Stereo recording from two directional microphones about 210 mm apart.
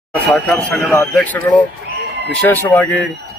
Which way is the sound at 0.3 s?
5° left (ahead or behind).